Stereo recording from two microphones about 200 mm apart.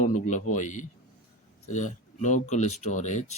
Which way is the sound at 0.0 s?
35° left (ahead or behind).